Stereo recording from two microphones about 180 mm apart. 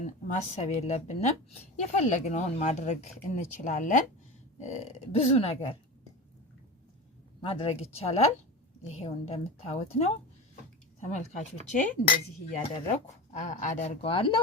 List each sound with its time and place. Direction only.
0.0 s a woman's voice: 40° left (ahead or behind)
7.4 s a woman's voice: 35° left (ahead or behind)
12.5 s a woman's voice: 40° left (ahead or behind)